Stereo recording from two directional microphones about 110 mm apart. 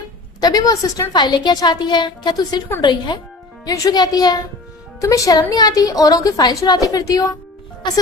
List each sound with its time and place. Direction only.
0.3 s a woman's voice: 35° left (ahead or behind)
3.7 s a woman's voice: 35° left (ahead or behind)